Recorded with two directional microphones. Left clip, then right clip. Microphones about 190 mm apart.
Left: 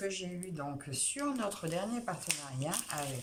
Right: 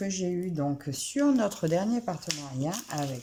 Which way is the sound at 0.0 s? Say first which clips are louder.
Right 7 dB; 30° right (ahead or behind).